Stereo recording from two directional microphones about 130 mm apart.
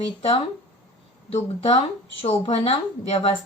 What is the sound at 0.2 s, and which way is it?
Speech, 50° left (ahead or behind).